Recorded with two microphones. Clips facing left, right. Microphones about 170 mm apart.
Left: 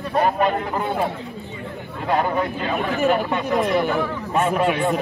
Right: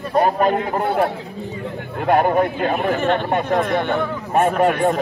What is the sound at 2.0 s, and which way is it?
Speech, 55° right (ahead or behind).